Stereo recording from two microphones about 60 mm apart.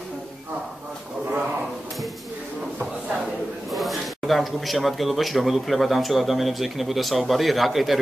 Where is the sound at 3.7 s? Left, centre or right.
Centre.